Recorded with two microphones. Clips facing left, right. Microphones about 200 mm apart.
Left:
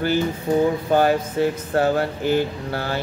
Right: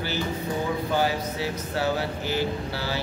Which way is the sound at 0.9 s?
50° left (ahead or behind).